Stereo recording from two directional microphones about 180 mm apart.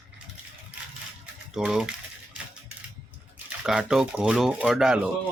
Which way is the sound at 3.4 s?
5° right (ahead or behind).